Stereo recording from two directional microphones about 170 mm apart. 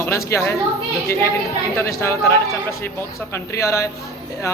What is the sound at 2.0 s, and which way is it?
A man's voice, 15° left (ahead or behind).